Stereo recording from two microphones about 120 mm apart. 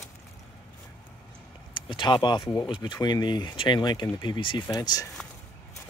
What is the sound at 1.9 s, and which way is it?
Speech, 45° left (ahead or behind).